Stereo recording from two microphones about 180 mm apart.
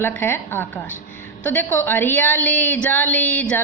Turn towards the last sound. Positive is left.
turn(degrees=10)  # may be behind; listen again after turning